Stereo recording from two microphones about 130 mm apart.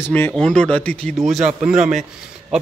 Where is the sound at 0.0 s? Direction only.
15° left (ahead or behind).